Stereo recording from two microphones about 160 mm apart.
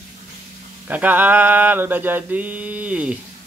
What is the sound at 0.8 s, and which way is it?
Mantra, 10° right (ahead or behind).